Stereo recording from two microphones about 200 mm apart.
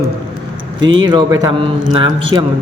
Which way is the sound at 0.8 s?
70° right (ahead or behind).